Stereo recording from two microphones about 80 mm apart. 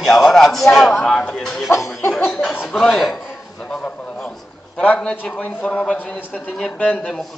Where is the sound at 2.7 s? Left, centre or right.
Centre.